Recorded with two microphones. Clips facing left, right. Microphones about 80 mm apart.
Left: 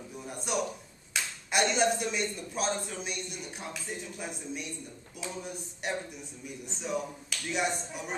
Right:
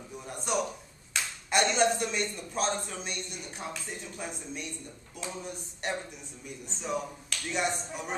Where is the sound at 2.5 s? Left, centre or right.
Centre.